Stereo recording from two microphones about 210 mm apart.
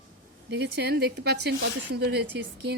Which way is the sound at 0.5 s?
55° right (ahead or behind).